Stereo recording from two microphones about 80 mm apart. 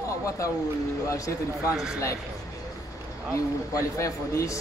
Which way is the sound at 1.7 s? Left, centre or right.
Centre.